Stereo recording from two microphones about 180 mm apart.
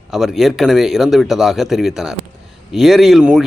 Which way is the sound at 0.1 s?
Centre (ahead or behind).